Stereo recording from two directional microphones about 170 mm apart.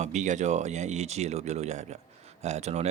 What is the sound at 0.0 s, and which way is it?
Speech, 45° right (ahead or behind).